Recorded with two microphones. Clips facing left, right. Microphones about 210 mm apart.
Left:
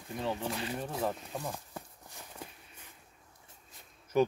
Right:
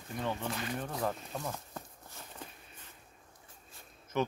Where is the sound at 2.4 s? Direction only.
10° left (ahead or behind).